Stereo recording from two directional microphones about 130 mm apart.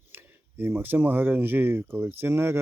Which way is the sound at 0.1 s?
15° right (ahead or behind).